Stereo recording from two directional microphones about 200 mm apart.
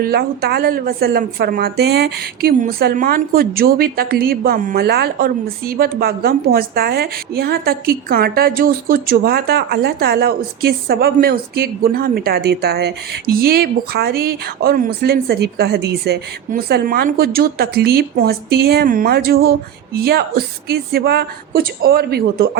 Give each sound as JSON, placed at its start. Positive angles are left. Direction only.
{"t": 0.0, "sound": "a woman's voice", "side_deg": -50}